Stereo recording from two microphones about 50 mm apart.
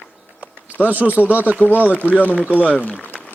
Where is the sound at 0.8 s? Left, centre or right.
Right.